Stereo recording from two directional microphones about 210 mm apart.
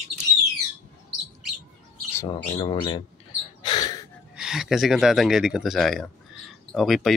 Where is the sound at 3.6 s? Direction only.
20° left (ahead or behind).